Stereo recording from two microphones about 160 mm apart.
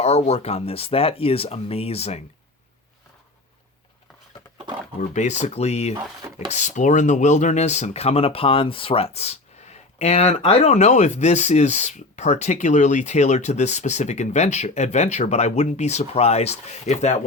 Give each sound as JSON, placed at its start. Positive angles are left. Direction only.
{"t": 0.0, "sound": "speech", "side_deg": 40}
{"t": 4.9, "sound": "speech", "side_deg": 45}